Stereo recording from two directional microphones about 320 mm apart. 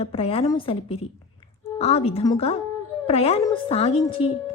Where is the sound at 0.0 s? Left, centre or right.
Centre.